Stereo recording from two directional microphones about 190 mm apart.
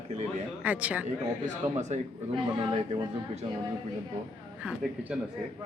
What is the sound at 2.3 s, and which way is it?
A man's voice, 25° right (ahead or behind).